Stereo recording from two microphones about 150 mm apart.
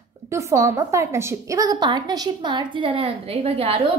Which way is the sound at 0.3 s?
20° right (ahead or behind).